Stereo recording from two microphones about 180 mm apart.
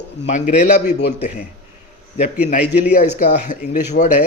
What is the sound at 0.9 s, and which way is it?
Speech, 65° left (ahead or behind).